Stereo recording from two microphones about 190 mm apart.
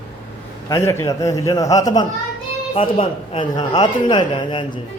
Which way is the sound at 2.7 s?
30° left (ahead or behind).